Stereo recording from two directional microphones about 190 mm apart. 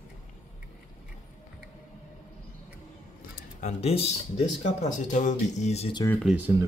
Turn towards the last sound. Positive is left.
turn(degrees=-5)  # may be behind; listen again after turning